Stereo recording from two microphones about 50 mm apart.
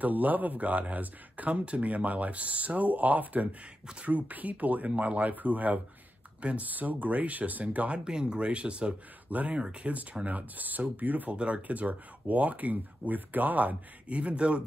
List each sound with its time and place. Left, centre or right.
0.0 s speech: right
8.0 s speech: centre
10.2 s speech: right
11.3 s speech: right
14.0 s speech: right